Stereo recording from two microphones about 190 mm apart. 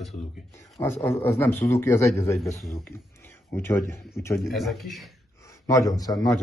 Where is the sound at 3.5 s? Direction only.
10° left (ahead or behind).